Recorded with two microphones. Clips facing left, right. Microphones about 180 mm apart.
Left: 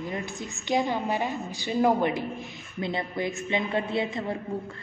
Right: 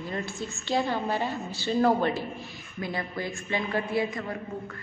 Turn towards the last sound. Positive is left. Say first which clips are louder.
# left 3 dB
turn(degrees=25)  # may be behind; listen again after turning